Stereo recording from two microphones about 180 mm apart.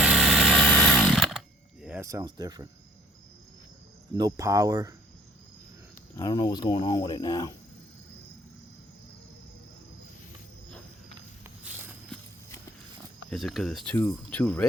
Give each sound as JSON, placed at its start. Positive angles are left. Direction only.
{"t": 0.0, "sound": "chainsaw", "side_deg": 0}
{"t": 2.0, "sound": "speech", "side_deg": -15}
{"t": 4.1, "sound": "speech", "side_deg": -20}
{"t": 6.1, "sound": "speech", "side_deg": 25}
{"t": 11.7, "sound": "a sound", "side_deg": -5}
{"t": 13.3, "sound": "speech", "side_deg": 0}